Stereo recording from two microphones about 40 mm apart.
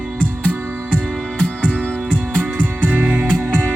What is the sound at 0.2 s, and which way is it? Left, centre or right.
Music, left.